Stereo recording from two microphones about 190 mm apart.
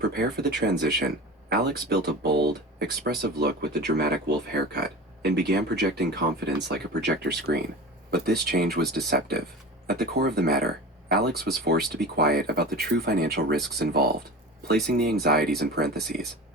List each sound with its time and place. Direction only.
0.0 s speech: 60° right (ahead or behind)